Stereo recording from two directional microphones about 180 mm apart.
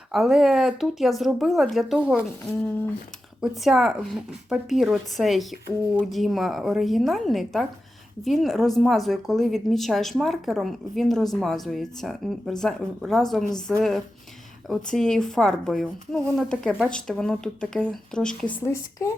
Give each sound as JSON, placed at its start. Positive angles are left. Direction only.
{"t": 0.1, "sound": "speech", "side_deg": 0}
{"t": 3.4, "sound": "speech", "side_deg": 0}
{"t": 18.5, "sound": "speech", "side_deg": 15}